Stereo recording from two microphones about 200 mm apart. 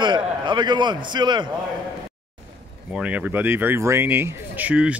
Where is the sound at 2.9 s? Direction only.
5° right (ahead or behind).